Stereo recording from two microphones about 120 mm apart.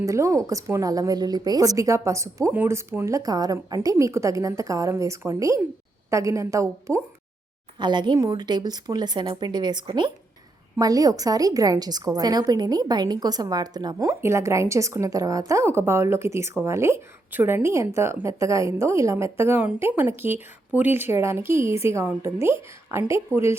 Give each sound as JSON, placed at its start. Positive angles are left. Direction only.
{"t": 0.0, "sound": "a woman's voice", "side_deg": -25}
{"t": 7.8, "sound": "a woman's voice", "side_deg": -40}